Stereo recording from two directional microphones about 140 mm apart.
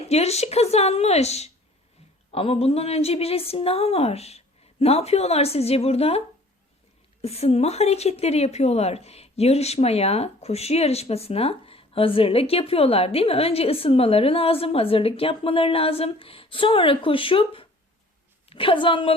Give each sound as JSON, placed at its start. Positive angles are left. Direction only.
{"t": 0.1, "sound": "a woman's voice", "side_deg": 50}